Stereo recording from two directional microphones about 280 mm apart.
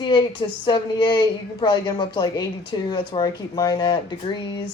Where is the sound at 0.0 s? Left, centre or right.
Centre.